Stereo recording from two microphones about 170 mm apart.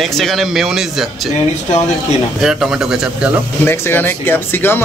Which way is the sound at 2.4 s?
5° right (ahead or behind).